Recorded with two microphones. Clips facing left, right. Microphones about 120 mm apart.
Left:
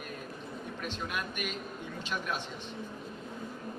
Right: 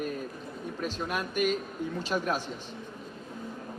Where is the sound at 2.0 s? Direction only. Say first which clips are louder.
Right 6 dB; 40° right (ahead or behind).